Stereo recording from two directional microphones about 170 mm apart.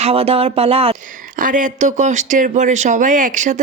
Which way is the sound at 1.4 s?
50° right (ahead or behind).